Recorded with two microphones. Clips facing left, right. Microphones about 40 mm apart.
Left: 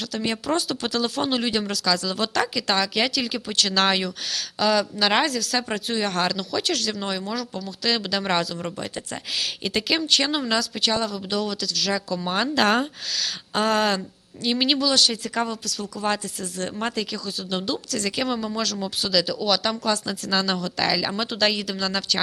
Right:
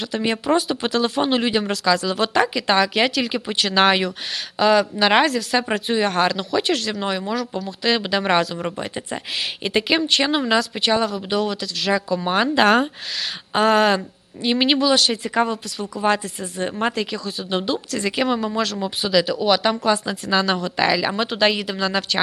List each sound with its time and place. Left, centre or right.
0.0 s speech: right